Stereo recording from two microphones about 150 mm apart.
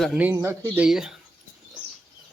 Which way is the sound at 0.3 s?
20° right (ahead or behind).